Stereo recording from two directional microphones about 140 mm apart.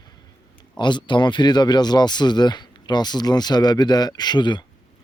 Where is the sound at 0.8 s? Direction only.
35° left (ahead or behind).